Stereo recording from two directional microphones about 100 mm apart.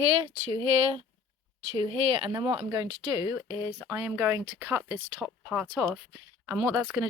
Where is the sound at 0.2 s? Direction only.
60° right (ahead or behind).